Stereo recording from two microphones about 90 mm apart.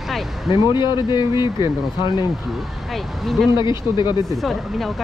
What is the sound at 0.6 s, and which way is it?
Speech, 60° left (ahead or behind).